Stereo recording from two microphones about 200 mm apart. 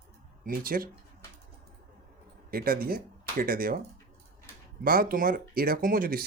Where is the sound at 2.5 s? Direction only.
45° right (ahead or behind).